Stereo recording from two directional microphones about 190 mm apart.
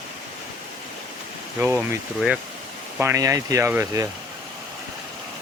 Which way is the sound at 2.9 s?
15° right (ahead or behind).